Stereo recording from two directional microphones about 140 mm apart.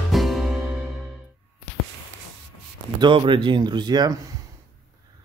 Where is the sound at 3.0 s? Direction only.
35° right (ahead or behind).